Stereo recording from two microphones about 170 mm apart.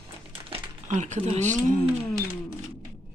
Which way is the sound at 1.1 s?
40° right (ahead or behind).